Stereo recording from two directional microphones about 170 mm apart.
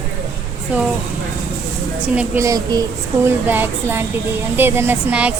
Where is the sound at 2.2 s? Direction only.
15° right (ahead or behind).